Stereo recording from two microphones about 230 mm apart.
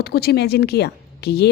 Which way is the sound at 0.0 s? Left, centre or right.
Left.